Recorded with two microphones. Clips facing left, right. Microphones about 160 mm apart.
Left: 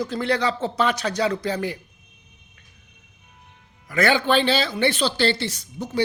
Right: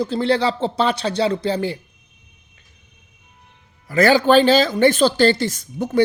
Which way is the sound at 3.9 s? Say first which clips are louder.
Right 6 dB; 35° right (ahead or behind).